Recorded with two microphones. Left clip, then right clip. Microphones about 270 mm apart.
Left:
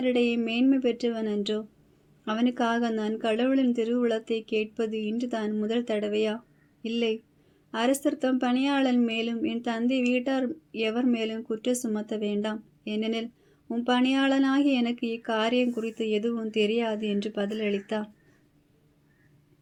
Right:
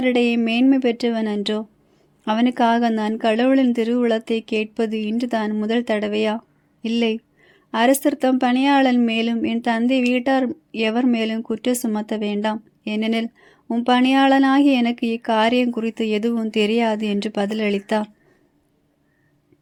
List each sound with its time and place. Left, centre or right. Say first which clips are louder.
0.0 s speech: right 7 dB; right